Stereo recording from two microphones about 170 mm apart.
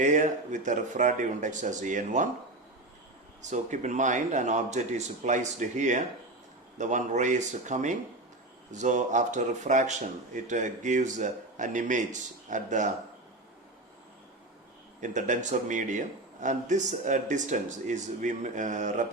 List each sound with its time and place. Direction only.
0.0 s speech: 50° right (ahead or behind)
3.4 s speech: 45° right (ahead or behind)
15.0 s speech: 45° right (ahead or behind)